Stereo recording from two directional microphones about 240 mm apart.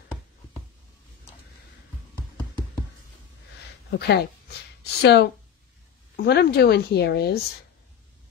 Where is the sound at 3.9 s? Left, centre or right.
Left.